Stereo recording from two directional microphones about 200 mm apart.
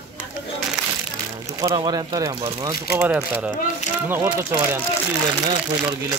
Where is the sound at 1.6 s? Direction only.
20° right (ahead or behind).